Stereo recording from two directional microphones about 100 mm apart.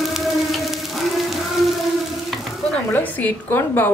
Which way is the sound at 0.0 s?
Centre (ahead or behind).